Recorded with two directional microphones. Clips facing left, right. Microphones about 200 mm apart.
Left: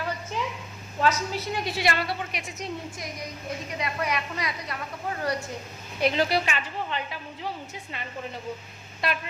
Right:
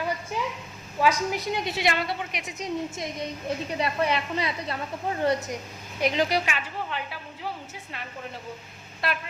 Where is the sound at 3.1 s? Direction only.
30° right (ahead or behind); by 7.5 s 10° right (ahead or behind).